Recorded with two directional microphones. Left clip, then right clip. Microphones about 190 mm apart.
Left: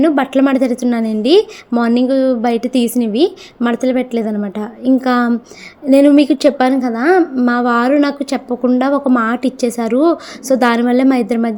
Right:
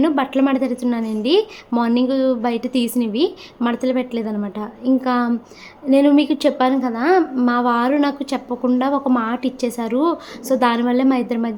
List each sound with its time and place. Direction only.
0.0 s a woman's voice: 25° left (ahead or behind)